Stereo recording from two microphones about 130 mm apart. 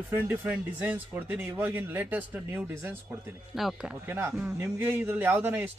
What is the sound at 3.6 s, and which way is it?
Speech, 5° right (ahead or behind).